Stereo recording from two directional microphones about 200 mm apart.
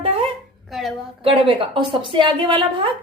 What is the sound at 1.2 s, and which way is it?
A woman's voice, 25° right (ahead or behind).